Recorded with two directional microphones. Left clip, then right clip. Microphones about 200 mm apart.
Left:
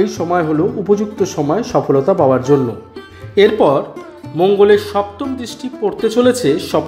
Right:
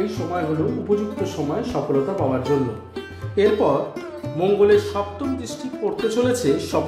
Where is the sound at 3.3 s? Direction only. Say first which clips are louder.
Left 7 dB; 30° left (ahead or behind).